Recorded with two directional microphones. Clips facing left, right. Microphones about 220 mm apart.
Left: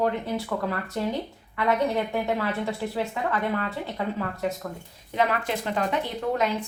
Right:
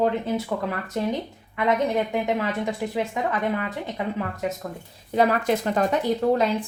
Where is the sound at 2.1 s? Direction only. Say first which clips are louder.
Right 2 dB; 15° right (ahead or behind).